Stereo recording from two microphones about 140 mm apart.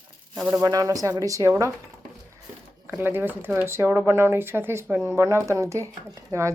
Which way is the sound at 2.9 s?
15° right (ahead or behind).